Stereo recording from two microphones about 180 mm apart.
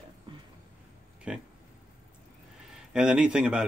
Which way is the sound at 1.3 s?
5° right (ahead or behind).